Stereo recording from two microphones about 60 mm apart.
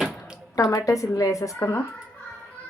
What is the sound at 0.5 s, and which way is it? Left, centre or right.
A woman's voice, left.